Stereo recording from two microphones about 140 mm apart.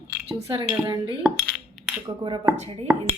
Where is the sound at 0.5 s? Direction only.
40° right (ahead or behind).